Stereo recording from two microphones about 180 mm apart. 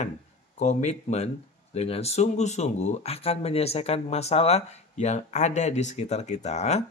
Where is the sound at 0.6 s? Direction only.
40° left (ahead or behind).